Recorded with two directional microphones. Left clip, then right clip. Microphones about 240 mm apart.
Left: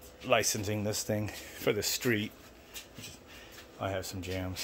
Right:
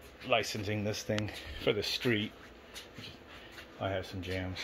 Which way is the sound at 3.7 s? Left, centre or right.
Centre.